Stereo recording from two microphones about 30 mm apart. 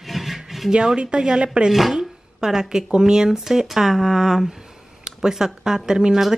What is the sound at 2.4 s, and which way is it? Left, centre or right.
Speech, right.